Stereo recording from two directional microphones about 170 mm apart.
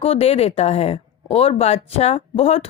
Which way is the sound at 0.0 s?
35° left (ahead or behind).